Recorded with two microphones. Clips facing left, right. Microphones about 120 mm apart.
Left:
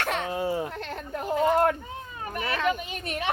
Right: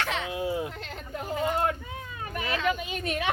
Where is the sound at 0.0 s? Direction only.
50° left (ahead or behind).